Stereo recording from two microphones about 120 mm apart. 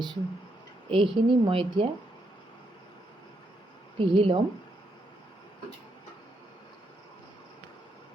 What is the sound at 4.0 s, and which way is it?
Speech, 50° right (ahead or behind).